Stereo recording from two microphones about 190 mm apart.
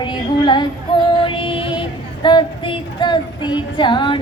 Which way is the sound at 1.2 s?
25° left (ahead or behind).